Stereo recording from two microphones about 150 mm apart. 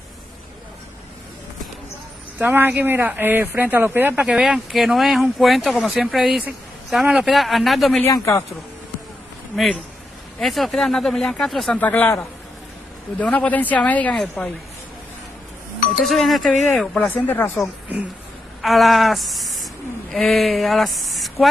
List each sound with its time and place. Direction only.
2.3 s speech: 10° right (ahead or behind)
8.0 s speech: 20° left (ahead or behind)
10.4 s a woman's voice: centre (ahead or behind)
16.0 s a woman's voice: centre (ahead or behind)
18.6 s a sound: centre (ahead or behind)